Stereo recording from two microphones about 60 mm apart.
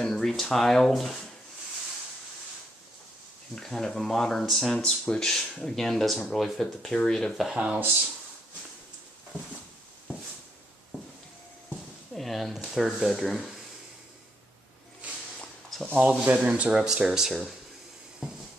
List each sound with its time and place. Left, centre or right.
0.0 s speech: centre
3.5 s speech: centre
4.7 s speech: centre
7.5 s speech: centre
12.1 s speech: centre
15.9 s speech: right; by 17.6 s centre